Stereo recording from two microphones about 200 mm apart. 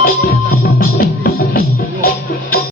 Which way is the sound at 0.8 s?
50° left (ahead or behind).